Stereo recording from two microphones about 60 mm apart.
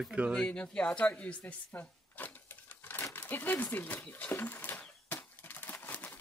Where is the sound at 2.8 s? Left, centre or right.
Left.